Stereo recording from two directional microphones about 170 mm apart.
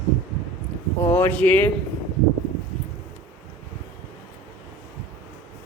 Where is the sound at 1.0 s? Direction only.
15° left (ahead or behind).